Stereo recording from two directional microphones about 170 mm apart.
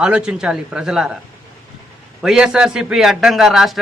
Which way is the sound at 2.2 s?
5° right (ahead or behind).